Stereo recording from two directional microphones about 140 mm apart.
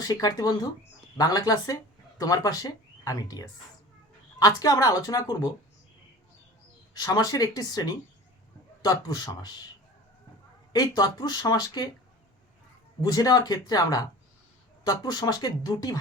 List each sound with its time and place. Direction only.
0.0 s speech: 25° left (ahead or behind)
6.9 s speech: 25° left (ahead or behind)
10.7 s speech: 25° left (ahead or behind)
13.0 s speech: 25° left (ahead or behind)